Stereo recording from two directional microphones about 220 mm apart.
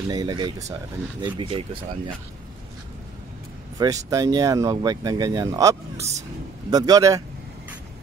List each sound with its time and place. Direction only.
0.1 s speech: 15° right (ahead or behind)
3.7 s speech: 15° right (ahead or behind)